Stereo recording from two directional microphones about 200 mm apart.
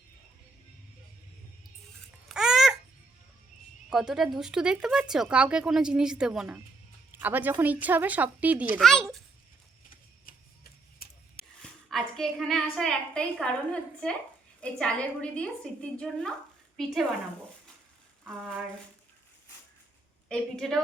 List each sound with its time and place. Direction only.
2.3 s babbling: 5° right (ahead or behind)
3.8 s a woman's voice: 5° right (ahead or behind)
10.2 s a sound: 50° left (ahead or behind)
11.6 s a woman's voice: centre (ahead or behind)
18.3 s a woman's voice: centre (ahead or behind)
20.2 s a woman's voice: 5° left (ahead or behind)